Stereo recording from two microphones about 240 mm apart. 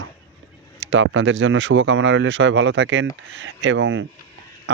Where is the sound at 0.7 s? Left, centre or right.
Right.